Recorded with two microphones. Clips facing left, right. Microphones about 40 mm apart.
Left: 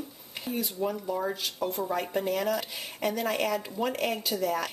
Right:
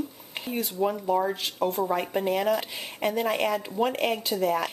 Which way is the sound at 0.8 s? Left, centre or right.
Right.